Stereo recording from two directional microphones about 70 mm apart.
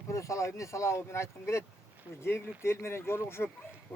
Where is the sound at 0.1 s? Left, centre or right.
Left.